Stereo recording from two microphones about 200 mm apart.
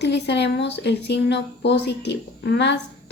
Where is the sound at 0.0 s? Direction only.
60° left (ahead or behind).